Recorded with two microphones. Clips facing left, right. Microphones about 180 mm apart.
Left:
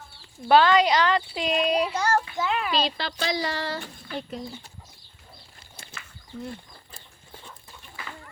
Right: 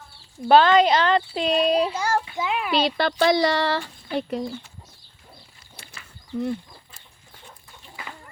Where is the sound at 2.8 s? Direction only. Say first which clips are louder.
Right 9 dB; 60° right (ahead or behind).